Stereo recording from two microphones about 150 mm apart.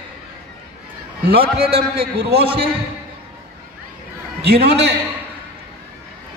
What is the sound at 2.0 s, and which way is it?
Speech, 90° right.